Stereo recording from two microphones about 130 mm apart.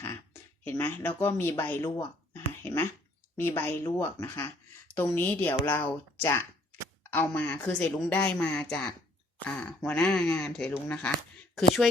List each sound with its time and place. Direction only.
0.6 s a woman's voice: 15° left (ahead or behind)
2.3 s a sound: 20° left (ahead or behind)
3.3 s a woman's voice: 15° left (ahead or behind)